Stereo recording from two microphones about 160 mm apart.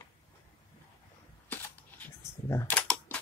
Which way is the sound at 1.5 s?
15° left (ahead or behind).